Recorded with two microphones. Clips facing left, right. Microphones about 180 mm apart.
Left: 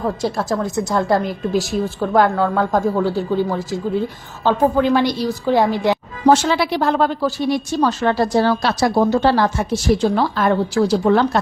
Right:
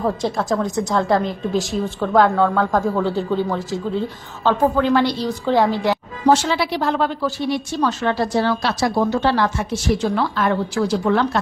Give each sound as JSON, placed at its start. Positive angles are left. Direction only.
{"t": 0.0, "sound": "a woman's voice", "side_deg": 5}
{"t": 6.2, "sound": "a woman's voice", "side_deg": 50}